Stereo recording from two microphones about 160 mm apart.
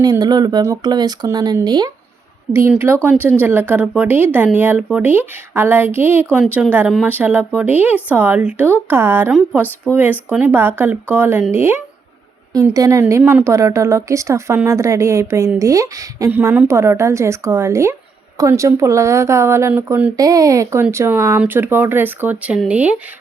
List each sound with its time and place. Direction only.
0.0 s speech: 25° right (ahead or behind)
2.5 s speech: 15° right (ahead or behind)
20.1 s speech: 20° right (ahead or behind)